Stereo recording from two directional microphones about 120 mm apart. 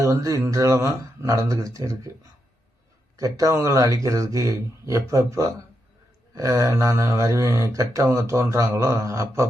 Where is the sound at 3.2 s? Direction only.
30° right (ahead or behind).